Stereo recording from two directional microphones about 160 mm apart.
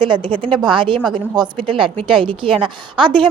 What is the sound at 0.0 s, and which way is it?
A woman's voice, 30° right (ahead or behind).